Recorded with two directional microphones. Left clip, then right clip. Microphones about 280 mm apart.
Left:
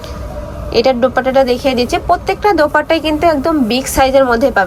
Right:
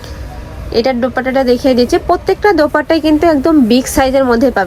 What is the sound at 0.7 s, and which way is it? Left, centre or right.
A woman's voice, centre.